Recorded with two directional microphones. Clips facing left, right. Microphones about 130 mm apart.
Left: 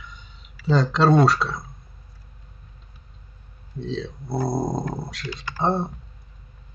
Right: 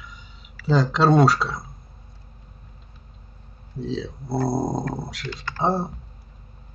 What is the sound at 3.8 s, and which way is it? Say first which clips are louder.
Speech: right 1 dB; centre (ahead or behind).